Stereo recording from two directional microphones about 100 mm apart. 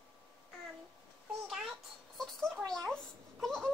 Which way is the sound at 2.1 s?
5° left (ahead or behind).